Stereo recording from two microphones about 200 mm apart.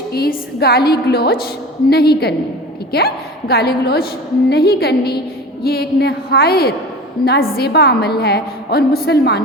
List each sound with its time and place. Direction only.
0.1 s a woman's voice: 50° left (ahead or behind)